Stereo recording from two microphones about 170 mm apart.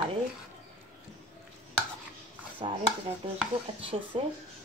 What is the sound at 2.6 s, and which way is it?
Speech, 35° right (ahead or behind).